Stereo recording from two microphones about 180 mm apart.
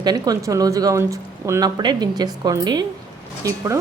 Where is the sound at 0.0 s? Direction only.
20° right (ahead or behind).